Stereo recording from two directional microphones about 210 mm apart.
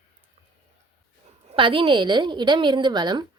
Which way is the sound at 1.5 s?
25° right (ahead or behind).